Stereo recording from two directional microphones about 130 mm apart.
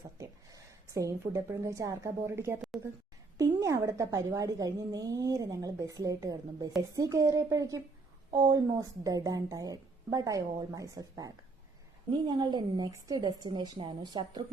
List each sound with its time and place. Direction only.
0.2 s a woman's voice: 25° right (ahead or behind)
12.3 s a woman's voice: 35° right (ahead or behind)